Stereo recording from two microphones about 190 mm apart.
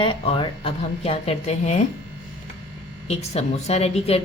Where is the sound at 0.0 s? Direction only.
30° left (ahead or behind).